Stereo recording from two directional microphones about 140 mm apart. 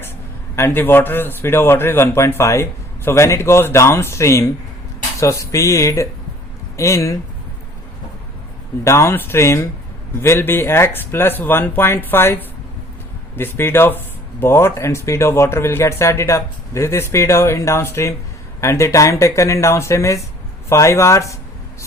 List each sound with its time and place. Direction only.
0.5 s a man's voice: 15° left (ahead or behind)
8.8 s a man's voice: 20° left (ahead or behind)